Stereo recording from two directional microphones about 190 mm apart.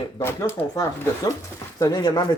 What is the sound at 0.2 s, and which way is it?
Speech, 15° left (ahead or behind).